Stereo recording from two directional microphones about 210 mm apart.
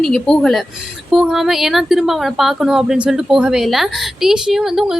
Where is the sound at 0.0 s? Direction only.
5° left (ahead or behind).